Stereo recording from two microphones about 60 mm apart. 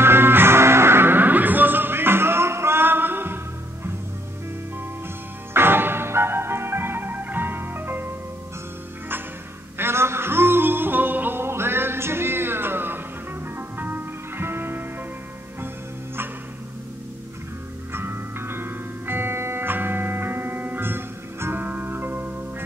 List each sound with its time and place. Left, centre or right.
0.0 s music: right
5.5 s music: right
9.8 s music: right
17.9 s music: right